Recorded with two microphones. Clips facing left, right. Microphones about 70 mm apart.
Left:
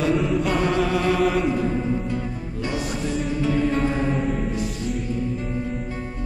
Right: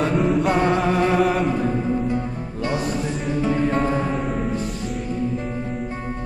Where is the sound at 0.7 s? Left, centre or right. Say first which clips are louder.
Right 2 dB; right.